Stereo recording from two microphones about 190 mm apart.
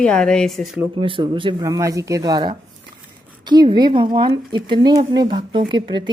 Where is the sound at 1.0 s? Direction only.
25° right (ahead or behind).